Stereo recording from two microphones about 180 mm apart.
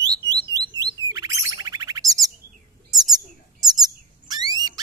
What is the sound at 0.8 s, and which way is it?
Chirp, 20° right (ahead or behind).